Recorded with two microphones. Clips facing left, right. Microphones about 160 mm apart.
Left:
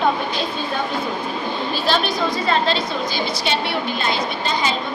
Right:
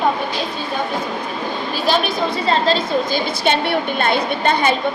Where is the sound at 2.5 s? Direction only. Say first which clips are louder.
Right 5 dB; 45° right (ahead or behind).